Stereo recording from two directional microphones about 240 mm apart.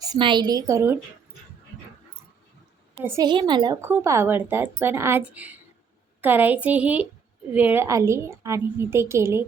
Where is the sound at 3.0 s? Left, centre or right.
Centre.